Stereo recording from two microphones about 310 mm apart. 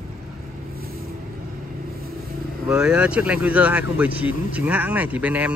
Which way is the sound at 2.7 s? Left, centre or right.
Centre.